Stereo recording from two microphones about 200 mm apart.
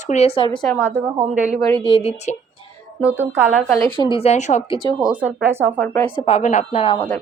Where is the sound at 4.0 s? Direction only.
25° left (ahead or behind).